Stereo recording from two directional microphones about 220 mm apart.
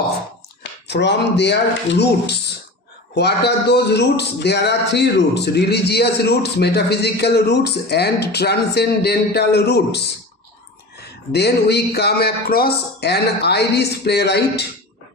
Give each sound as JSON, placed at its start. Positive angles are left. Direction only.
{"t": 0.6, "sound": "speech", "side_deg": 50}
{"t": 11.3, "sound": "speech", "side_deg": 50}